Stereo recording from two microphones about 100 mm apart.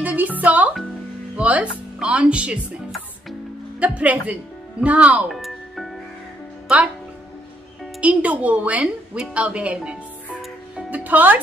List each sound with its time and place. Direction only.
0.0 s music: 15° right (ahead or behind)
1.3 s speech: 15° right (ahead or behind)
3.8 s speech: 15° right (ahead or behind)
5.3 s music: centre (ahead or behind)
8.0 s a woman's voice: 15° right (ahead or behind)